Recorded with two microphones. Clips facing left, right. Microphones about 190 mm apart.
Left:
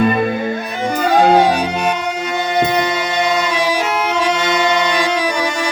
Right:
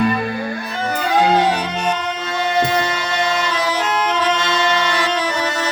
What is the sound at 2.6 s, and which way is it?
Music, 15° left (ahead or behind).